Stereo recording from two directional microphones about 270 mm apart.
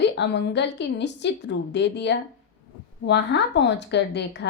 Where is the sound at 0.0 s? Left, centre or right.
Left.